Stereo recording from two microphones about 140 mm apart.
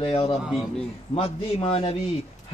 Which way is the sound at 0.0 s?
45° left (ahead or behind).